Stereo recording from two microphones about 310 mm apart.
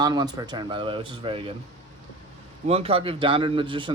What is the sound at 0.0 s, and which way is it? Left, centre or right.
A man's voice, centre.